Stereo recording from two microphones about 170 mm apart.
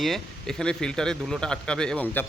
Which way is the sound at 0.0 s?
Centre (ahead or behind).